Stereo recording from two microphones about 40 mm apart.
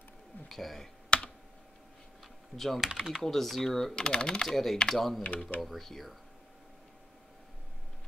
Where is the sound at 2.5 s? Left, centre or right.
Centre.